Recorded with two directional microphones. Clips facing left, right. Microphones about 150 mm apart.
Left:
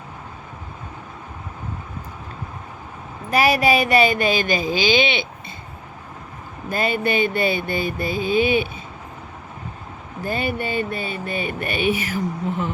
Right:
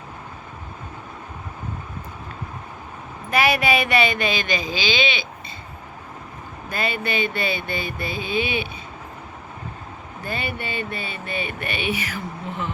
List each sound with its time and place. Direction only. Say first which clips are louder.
3.2 s a woman's voice: left 3 dB; 35° left (ahead or behind); by 5.2 s 55° left (ahead or behind)
6.7 s speech: left 5 dB; 45° left (ahead or behind)
10.2 s speech: left 5 dB; 45° left (ahead or behind)